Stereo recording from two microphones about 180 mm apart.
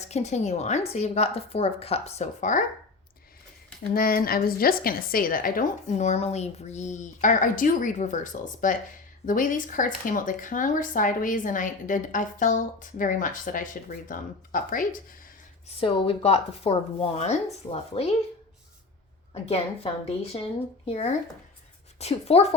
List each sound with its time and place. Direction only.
0.1 s a woman's voice: 40° left (ahead or behind)
3.9 s speech: 55° left (ahead or behind)
15.8 s a woman's voice: 30° left (ahead or behind)
19.3 s a woman's voice: 35° left (ahead or behind)